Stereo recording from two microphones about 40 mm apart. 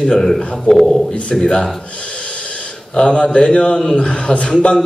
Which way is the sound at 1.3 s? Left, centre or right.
Centre.